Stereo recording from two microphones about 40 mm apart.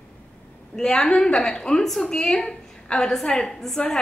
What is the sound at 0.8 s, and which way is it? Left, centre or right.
Speech, centre.